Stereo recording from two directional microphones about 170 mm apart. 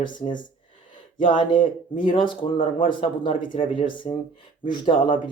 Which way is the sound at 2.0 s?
30° left (ahead or behind).